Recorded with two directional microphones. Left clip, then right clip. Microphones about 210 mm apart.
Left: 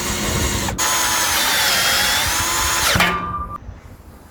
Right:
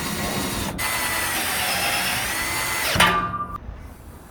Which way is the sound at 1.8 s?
30° left (ahead or behind).